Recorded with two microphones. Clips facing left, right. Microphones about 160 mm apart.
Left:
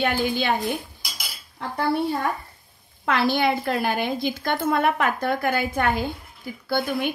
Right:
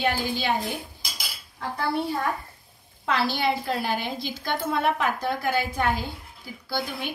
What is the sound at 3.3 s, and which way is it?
A woman's voice, 55° left (ahead or behind).